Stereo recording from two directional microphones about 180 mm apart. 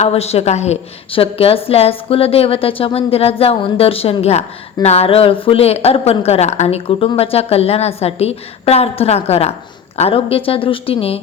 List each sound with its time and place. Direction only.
0.0 s a woman's voice: 35° left (ahead or behind)